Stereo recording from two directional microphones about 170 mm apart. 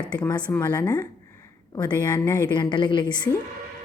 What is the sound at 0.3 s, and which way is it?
A woman's voice, 25° left (ahead or behind).